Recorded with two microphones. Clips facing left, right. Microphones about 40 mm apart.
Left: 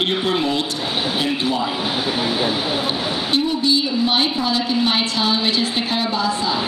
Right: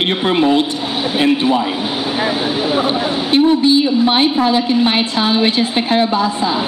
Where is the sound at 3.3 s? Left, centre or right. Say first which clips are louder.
Right 8 dB; right.